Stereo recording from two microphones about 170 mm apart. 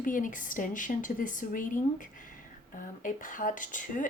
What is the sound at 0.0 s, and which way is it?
A woman's voice, 50° left (ahead or behind).